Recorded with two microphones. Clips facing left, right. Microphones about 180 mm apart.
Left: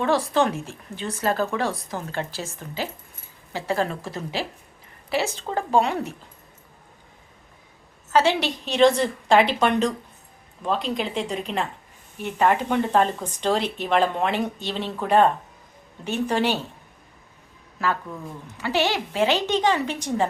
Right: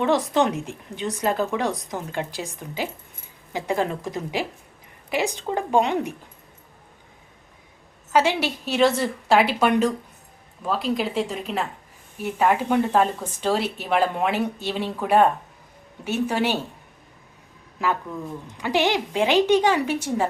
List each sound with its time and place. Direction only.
0.0 s speech: 20° right (ahead or behind)
8.1 s speech: 10° right (ahead or behind)
17.8 s speech: 15° right (ahead or behind)